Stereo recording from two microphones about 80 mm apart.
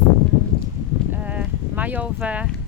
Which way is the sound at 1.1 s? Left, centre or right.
Centre.